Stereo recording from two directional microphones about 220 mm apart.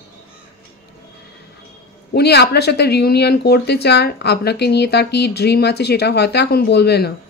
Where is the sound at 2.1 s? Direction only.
50° left (ahead or behind).